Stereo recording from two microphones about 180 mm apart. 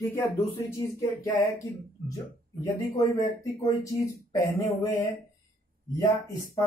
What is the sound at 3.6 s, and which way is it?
Speech, 15° left (ahead or behind).